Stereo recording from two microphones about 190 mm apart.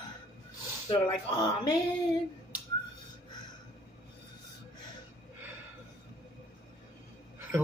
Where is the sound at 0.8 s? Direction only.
20° left (ahead or behind).